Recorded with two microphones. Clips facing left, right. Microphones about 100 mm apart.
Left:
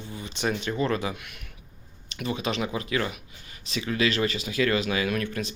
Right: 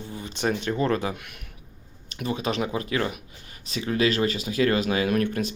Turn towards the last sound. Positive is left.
turn(degrees=-45)  # may be behind; listen again after turning